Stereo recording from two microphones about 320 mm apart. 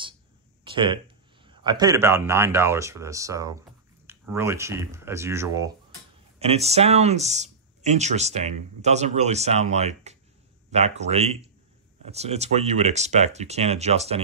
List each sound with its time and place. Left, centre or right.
0.7 s speech: centre